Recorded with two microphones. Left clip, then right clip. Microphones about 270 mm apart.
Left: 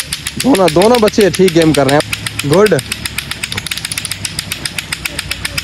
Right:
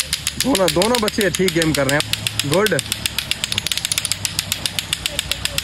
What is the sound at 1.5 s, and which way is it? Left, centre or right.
Speech, left.